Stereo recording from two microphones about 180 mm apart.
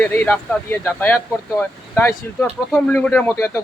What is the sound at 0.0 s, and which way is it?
Speech, 10° left (ahead or behind).